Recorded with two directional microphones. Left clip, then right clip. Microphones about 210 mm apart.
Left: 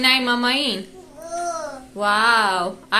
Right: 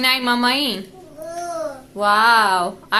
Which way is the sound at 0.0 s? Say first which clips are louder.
Even; 20° right (ahead or behind).